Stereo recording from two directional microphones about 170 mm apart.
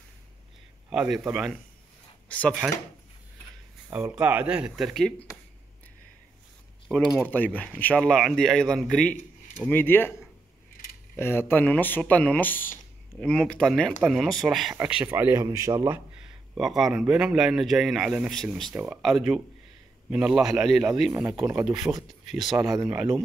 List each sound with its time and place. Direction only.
0.8 s a man's voice: 5° right (ahead or behind)
2.6 s a man's voice: 5° right (ahead or behind)
3.9 s speech: 10° right (ahead or behind)
7.2 s a man's voice: 10° left (ahead or behind)
11.1 s a man's voice: 15° left (ahead or behind); by 16.0 s 20° right (ahead or behind)
16.2 s a man's voice: 5° right (ahead or behind)
21.1 s speech: 25° right (ahead or behind)
21.9 s speech: 10° right (ahead or behind)
22.2 s speech: centre (ahead or behind)
22.6 s speech: 15° right (ahead or behind)